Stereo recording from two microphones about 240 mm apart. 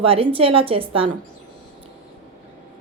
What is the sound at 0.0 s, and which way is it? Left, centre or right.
A woman's voice, right.